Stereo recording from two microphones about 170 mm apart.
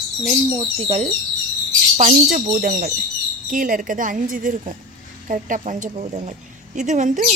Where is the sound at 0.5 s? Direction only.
30° right (ahead or behind).